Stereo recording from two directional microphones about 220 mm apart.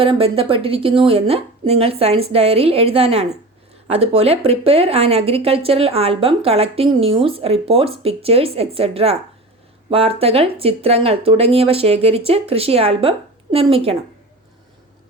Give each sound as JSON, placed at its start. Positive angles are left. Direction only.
{"t": 0.0, "sound": "speech", "side_deg": -25}